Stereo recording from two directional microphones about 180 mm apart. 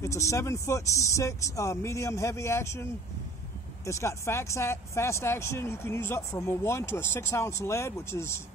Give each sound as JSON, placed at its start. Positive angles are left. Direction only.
{"t": 0.0, "sound": "speech", "side_deg": 15}